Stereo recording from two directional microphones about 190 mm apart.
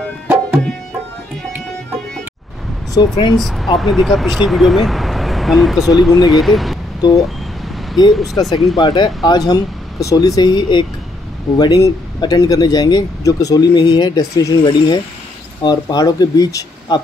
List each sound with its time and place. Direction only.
3.0 s speech: 25° left (ahead or behind)
3.3 s speech: centre (ahead or behind)
7.2 s a sound: centre (ahead or behind)
8.1 s speech: centre (ahead or behind)
8.7 s speech: 20° left (ahead or behind)